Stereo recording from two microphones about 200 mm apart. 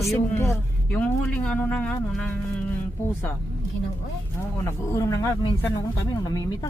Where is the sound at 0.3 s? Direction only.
10° left (ahead or behind).